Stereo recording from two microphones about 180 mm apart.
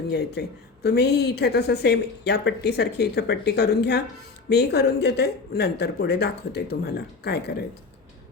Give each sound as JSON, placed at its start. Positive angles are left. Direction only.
{"t": 0.1, "sound": "a woman's voice", "side_deg": 65}